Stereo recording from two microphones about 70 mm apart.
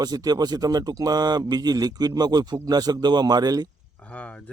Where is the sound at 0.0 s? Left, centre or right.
Right.